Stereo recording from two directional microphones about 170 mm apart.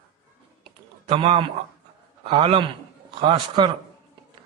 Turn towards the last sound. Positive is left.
turn(degrees=-30)  # may be behind; listen again after turning